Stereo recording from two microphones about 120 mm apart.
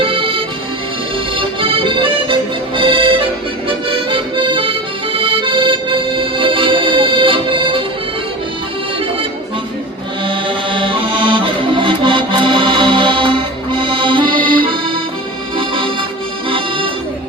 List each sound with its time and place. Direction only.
0.0 s accordion: 45° right (ahead or behind)
3.7 s music: 45° right (ahead or behind)
5.1 s accordion: 45° right (ahead or behind)
10.2 s accordion: 45° right (ahead or behind)